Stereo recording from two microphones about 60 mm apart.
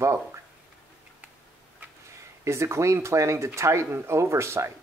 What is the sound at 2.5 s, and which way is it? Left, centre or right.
Speech, right.